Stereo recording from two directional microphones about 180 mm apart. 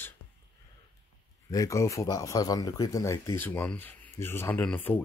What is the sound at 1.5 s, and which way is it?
Speech, 20° left (ahead or behind).